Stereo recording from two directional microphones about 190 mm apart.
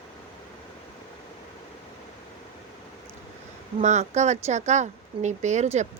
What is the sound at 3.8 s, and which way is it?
A woman's voice, 40° right (ahead or behind).